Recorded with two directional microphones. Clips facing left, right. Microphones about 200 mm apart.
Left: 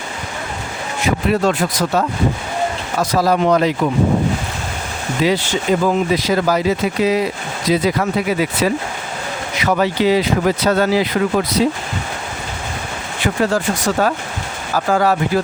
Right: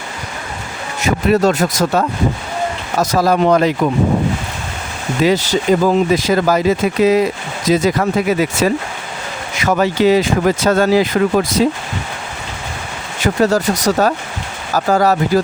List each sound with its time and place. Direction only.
1.0 s speech: 40° right (ahead or behind)
5.2 s speech: 40° right (ahead or behind)
13.1 s speech: 40° right (ahead or behind)